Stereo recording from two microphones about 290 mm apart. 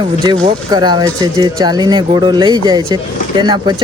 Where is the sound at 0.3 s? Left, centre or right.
Centre.